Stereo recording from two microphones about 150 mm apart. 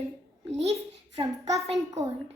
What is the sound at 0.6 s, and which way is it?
Speech, 45° right (ahead or behind).